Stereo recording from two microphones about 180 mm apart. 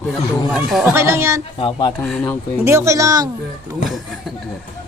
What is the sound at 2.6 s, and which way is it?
Speech, 15° right (ahead or behind).